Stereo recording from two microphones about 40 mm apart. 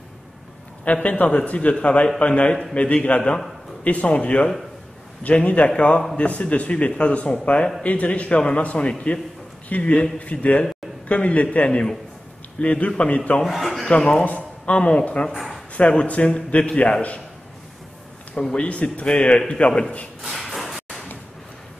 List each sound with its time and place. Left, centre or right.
1.0 s a man's voice: left
13.5 s a man's voice: centre
13.8 s a man's voice: left
14.2 s a sound: left
14.8 s a man's voice: left
15.3 s a sound: centre
15.7 s a man's voice: left
18.5 s a man's voice: left
20.2 s a sound: centre